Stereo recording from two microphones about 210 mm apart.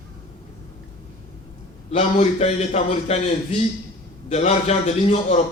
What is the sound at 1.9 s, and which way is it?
A man's voice, 30° left (ahead or behind).